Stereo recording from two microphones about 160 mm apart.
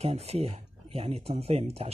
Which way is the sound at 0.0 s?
40° right (ahead or behind).